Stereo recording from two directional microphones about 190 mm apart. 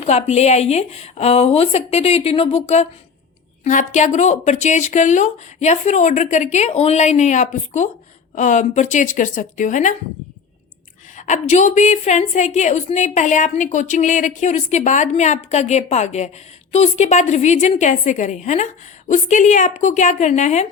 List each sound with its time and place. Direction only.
0.0 s a woman's voice: 35° left (ahead or behind)
11.2 s a woman's voice: 40° left (ahead or behind)